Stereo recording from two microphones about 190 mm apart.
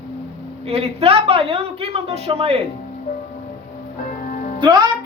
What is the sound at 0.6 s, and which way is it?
A woman's voice, 30° right (ahead or behind).